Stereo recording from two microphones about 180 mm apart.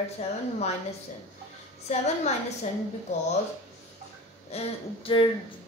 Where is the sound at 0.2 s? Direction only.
40° left (ahead or behind).